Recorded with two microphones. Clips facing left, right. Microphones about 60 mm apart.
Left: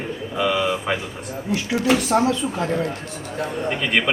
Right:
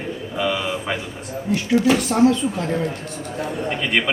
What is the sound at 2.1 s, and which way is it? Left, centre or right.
Speech, centre.